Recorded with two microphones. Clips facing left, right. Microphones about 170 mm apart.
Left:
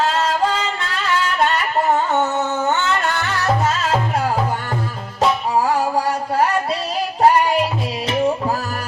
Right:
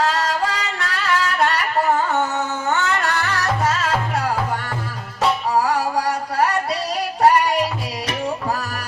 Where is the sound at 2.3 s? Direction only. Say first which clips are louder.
Left 2 dB; 25° left (ahead or behind).